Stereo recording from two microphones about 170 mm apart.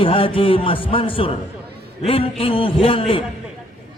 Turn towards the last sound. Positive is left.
turn(degrees=30)  # may be behind; listen again after turning